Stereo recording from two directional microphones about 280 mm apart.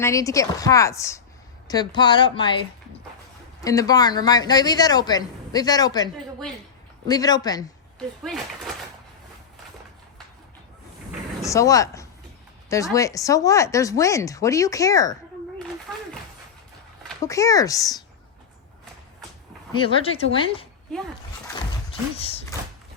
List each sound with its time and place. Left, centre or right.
0.0 s speech: centre
3.6 s speech: centre
7.1 s speech: centre
7.9 s speech: centre
11.4 s speech: centre
15.5 s a sound: centre
17.2 s speech: centre
19.7 s speech: centre
22.2 s speech: left